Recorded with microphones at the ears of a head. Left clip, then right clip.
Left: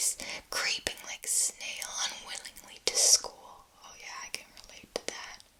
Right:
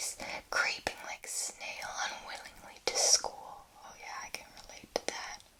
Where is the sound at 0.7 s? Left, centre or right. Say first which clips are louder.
Left 3 dB; left.